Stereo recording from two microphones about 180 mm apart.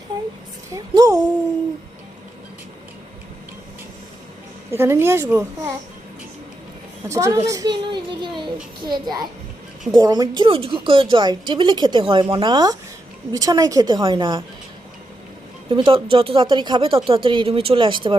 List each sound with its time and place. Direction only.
0.1 s a sound: 25° right (ahead or behind)
4.7 s a child's voice: 15° right (ahead or behind)
7.1 s a child's voice: 15° right (ahead or behind)
9.9 s a woman's voice: 20° right (ahead or behind)
15.7 s a woman's voice: 30° right (ahead or behind)